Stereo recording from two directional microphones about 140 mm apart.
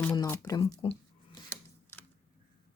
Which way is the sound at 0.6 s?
45° left (ahead or behind).